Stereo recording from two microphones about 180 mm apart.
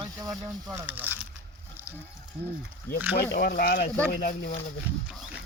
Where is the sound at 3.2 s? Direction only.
60° left (ahead or behind).